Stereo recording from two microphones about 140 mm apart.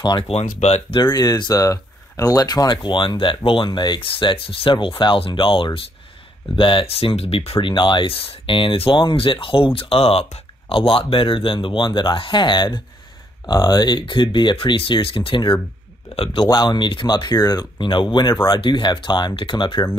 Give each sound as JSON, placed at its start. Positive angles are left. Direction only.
{"t": 0.2, "sound": "speech", "side_deg": 50}
{"t": 16.1, "sound": "speech", "side_deg": 50}
{"t": 16.4, "sound": "speech", "side_deg": 30}